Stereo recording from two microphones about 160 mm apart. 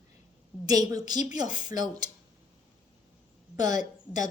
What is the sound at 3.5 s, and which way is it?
Speech, 25° right (ahead or behind).